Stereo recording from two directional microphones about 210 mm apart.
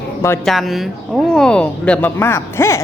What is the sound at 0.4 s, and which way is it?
Speech, centre (ahead or behind).